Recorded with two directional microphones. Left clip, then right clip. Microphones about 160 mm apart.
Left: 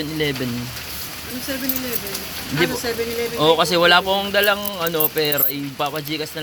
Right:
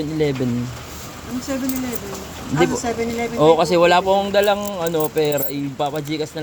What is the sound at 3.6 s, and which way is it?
Speech, 15° right (ahead or behind).